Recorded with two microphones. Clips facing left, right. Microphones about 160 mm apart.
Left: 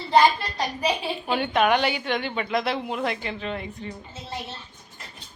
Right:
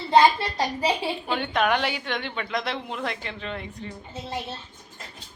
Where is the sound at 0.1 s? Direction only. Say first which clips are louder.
Right 1 dB; 25° right (ahead or behind).